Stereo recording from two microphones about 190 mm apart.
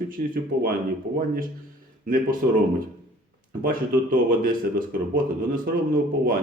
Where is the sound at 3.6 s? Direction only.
50° right (ahead or behind).